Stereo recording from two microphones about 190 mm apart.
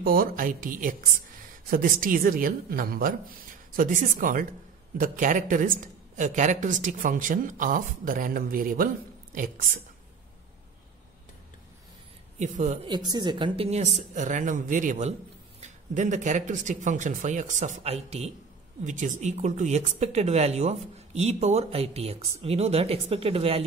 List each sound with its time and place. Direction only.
0.0 s speech: 50° right (ahead or behind)
12.4 s speech: 40° right (ahead or behind)
12.8 s speech: 20° right (ahead or behind)